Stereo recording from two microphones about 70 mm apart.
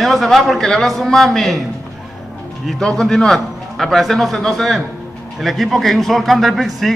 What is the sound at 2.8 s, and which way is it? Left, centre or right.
A man's voice, centre.